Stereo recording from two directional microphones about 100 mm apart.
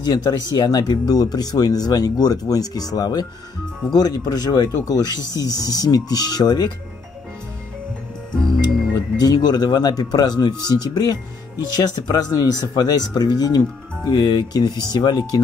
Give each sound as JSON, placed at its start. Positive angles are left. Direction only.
{"t": 0.0, "sound": "speech", "side_deg": 45}
{"t": 8.9, "sound": "speech", "side_deg": 40}